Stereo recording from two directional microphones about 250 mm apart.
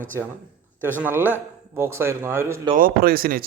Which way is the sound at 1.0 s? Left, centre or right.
Centre.